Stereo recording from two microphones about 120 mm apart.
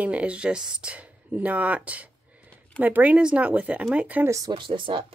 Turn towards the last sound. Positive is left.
turn(degrees=-45)  # may be behind; listen again after turning